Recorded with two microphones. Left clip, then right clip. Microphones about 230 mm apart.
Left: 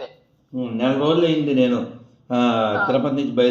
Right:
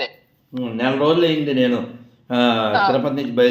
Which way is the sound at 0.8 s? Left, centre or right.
Right.